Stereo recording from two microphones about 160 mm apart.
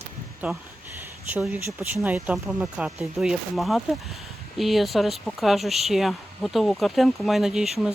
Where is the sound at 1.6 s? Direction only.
15° right (ahead or behind).